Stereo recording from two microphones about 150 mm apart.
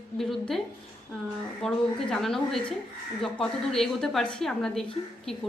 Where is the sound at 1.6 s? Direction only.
5° left (ahead or behind).